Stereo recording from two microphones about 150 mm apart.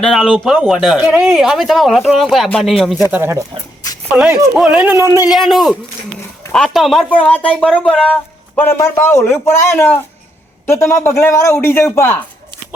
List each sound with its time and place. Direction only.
0.0 s speech: centre (ahead or behind)
3.1 s speech: 15° right (ahead or behind)
5.3 s speech: centre (ahead or behind); by 12.1 s 15° left (ahead or behind)